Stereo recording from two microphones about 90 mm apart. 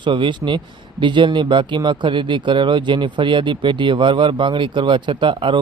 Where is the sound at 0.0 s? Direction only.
60° right (ahead or behind).